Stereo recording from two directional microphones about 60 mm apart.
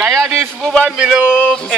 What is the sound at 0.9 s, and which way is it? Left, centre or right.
Speech, centre.